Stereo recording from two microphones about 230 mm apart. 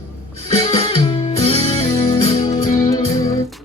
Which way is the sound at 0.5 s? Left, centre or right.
Left.